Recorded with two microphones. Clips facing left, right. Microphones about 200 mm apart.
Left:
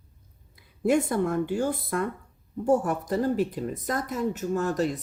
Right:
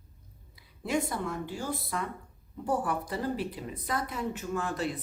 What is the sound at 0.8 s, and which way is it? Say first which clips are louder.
Speech: left 8 dB; 50° left (ahead or behind).